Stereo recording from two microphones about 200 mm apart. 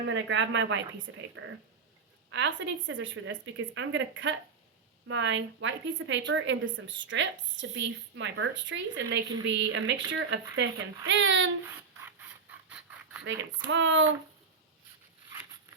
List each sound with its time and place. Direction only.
0.1 s a woman's voice: 65° right (ahead or behind)
11.6 s a sound: 10° right (ahead or behind)
13.7 s a woman's voice: 70° right (ahead or behind)